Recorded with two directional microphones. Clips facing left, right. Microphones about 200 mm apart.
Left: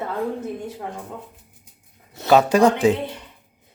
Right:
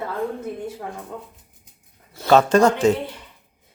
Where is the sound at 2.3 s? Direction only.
10° left (ahead or behind).